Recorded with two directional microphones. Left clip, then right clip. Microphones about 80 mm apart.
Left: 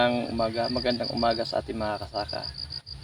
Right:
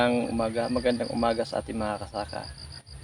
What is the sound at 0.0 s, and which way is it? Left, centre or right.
Speech, right.